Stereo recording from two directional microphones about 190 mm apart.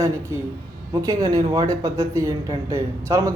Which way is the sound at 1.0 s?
20° right (ahead or behind).